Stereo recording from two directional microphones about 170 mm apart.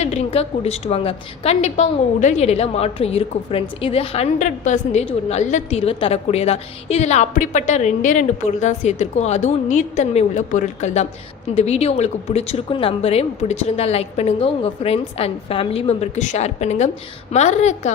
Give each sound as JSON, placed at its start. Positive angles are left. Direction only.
{"t": 0.0, "sound": "a woman's voice", "side_deg": 40}